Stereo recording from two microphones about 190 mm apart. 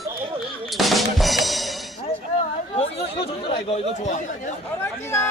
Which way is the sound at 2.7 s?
30° left (ahead or behind).